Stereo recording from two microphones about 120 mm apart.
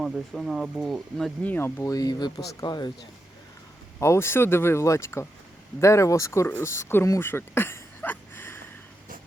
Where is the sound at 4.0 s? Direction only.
20° left (ahead or behind).